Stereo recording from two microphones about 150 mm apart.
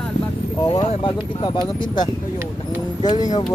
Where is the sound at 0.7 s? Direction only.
30° left (ahead or behind).